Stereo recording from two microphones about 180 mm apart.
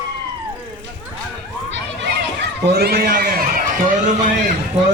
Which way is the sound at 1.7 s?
80° right.